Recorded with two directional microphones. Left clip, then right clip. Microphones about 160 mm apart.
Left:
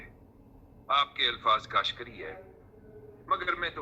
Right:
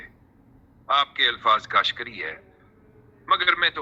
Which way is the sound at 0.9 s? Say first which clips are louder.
Right 6 dB; 50° right (ahead or behind).